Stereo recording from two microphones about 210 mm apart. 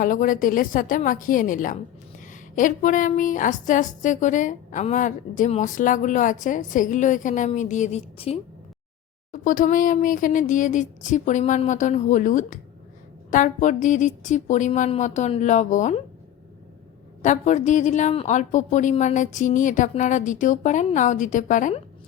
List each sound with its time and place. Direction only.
0.0 s a woman's voice: 40° left (ahead or behind)
17.2 s a woman's voice: 35° left (ahead or behind)